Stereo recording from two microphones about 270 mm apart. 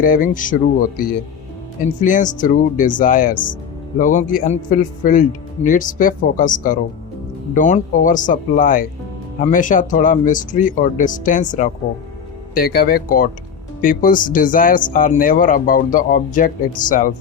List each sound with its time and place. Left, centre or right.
0.0 s speech: left